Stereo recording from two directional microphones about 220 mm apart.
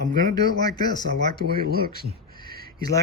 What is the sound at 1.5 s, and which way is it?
Speech, 45° right (ahead or behind).